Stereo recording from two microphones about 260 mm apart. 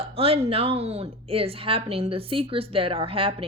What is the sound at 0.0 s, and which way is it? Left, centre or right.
A woman's voice, right.